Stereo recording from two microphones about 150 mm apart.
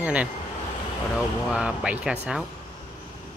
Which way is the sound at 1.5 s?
5° right (ahead or behind).